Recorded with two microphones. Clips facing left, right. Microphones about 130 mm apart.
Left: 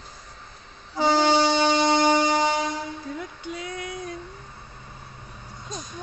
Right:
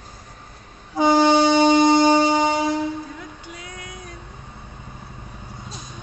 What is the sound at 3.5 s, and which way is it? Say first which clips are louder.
Female singing: left 5 dB; 25° left (ahead or behind).